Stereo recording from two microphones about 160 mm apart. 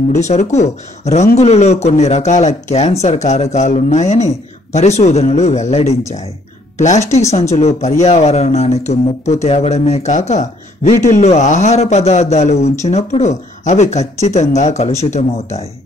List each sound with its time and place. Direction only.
0.1 s speech: 45° left (ahead or behind)